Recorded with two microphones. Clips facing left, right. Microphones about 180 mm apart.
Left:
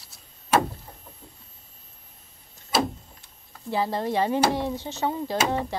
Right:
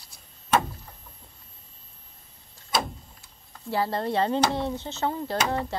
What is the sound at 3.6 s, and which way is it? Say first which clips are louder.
Speech: left 1 dB; 15° left (ahead or behind).